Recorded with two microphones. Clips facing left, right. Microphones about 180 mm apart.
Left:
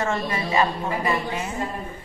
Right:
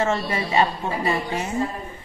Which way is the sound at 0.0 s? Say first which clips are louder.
Right 2 dB; 30° right (ahead or behind).